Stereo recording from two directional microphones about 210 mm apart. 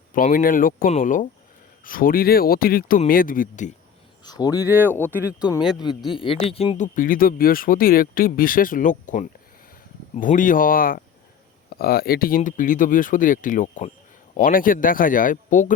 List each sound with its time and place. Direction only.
0.1 s speech: 40° left (ahead or behind)
4.2 s speech: 20° left (ahead or behind)
4.6 s speech: 10° right (ahead or behind)
6.1 s speech: 25° left (ahead or behind)